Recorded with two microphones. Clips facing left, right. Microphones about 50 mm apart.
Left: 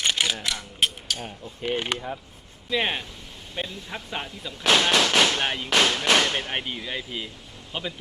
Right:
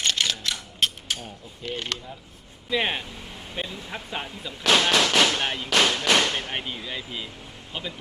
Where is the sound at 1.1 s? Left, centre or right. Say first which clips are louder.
Even; right.